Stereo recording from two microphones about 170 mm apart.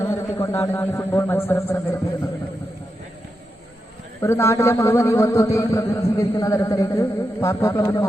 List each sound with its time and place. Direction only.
0.0 s a man's voice: 15° left (ahead or behind)
4.2 s a man's voice: 15° left (ahead or behind)